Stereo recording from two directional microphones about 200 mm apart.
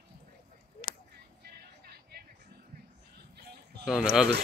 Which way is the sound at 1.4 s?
55° right (ahead or behind).